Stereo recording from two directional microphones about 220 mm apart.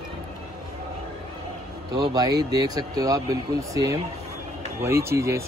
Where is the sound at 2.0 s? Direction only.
15° right (ahead or behind).